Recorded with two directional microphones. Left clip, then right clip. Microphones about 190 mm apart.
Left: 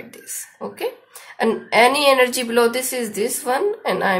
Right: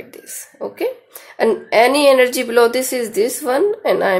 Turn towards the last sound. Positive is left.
turn(degrees=-40)  # may be behind; listen again after turning